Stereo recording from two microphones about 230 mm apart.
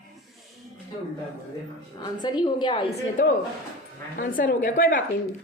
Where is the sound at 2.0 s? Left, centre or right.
Centre.